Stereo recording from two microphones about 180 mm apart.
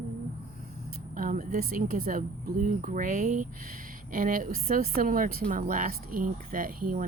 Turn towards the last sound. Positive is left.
turn(degrees=-50)  # may be behind; listen again after turning